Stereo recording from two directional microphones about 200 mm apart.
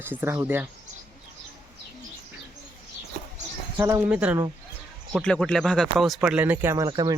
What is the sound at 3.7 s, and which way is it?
Speech, 10° right (ahead or behind).